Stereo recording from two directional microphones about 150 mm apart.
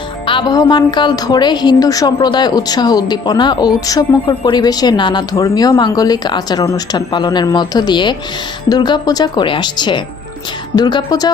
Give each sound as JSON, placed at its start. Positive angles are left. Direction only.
{"t": 0.3, "sound": "a woman's voice", "side_deg": 30}